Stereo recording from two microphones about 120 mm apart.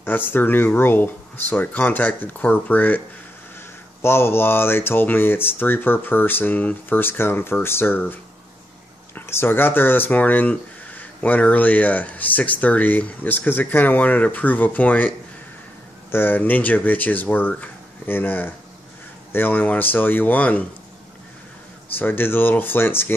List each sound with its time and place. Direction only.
0.0 s speech: 15° left (ahead or behind)
4.0 s speech: 20° left (ahead or behind)
21.9 s speech: 15° left (ahead or behind)